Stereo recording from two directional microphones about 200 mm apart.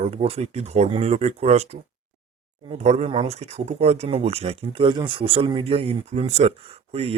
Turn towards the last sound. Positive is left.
turn(degrees=-30)  # may be behind; listen again after turning